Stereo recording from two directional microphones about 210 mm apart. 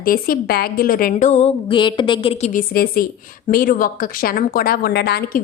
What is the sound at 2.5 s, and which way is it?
A woman's voice, 45° left (ahead or behind).